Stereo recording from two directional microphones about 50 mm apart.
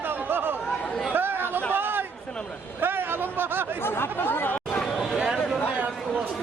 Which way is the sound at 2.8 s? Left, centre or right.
Right.